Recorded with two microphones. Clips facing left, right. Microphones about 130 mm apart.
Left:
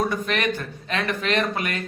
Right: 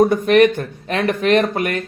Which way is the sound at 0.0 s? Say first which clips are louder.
Right 12 dB; 50° right (ahead or behind).